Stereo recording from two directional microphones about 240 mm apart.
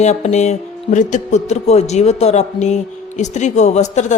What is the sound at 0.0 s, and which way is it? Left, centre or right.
Speech, left.